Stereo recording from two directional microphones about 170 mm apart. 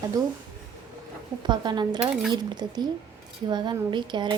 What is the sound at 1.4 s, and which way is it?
A woman's voice, 25° right (ahead or behind).